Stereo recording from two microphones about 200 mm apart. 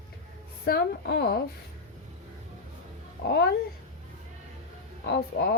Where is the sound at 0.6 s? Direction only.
55° left (ahead or behind).